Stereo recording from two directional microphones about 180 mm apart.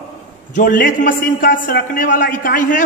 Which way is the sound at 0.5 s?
50° left (ahead or behind).